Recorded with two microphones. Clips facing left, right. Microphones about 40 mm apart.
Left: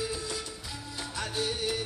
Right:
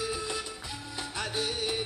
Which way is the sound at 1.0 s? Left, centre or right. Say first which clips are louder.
Even; right.